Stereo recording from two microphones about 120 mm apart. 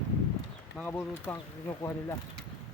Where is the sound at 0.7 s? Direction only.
15° left (ahead or behind).